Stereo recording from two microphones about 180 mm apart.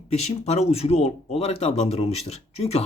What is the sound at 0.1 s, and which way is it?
Speech, 35° left (ahead or behind).